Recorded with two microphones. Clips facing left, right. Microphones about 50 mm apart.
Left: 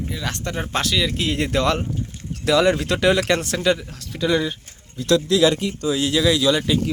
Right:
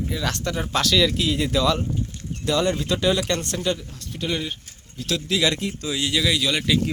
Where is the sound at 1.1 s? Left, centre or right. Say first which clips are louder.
Left 1 dB; left.